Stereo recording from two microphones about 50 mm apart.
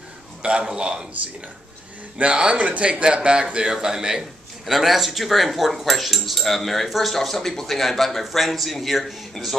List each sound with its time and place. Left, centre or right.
0.4 s a man's voice: right
2.1 s a man's voice: centre